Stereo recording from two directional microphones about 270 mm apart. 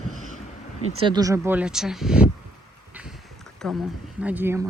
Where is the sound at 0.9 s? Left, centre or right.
Centre.